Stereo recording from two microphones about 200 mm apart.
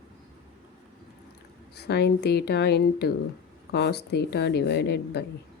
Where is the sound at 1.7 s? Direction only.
55° left (ahead or behind).